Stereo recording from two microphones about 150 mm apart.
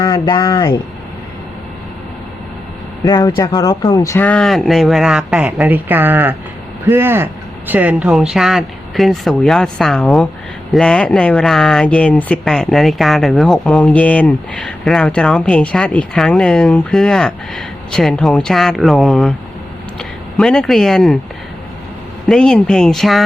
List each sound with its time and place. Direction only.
0.0 s speech: 25° left (ahead or behind)
3.0 s speech: 25° left (ahead or behind); by 21.2 s centre (ahead or behind)
22.3 s speech: 5° left (ahead or behind)